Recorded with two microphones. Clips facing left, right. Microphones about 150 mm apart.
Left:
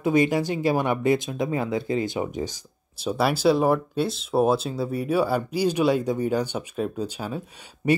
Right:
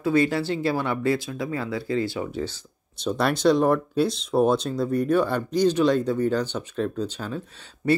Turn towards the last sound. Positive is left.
turn(degrees=10)  # may be behind; listen again after turning